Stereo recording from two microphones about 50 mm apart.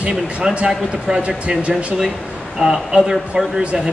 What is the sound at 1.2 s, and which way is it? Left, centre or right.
Speech, right.